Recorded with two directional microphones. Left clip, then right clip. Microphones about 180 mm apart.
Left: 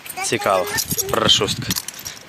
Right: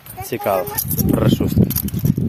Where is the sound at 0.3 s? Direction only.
10° right (ahead or behind).